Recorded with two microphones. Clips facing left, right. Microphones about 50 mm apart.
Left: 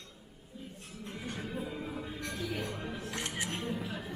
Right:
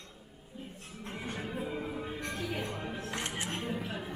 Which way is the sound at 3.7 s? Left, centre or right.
Right.